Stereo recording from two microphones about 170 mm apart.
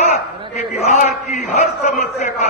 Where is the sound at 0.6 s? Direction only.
45° left (ahead or behind).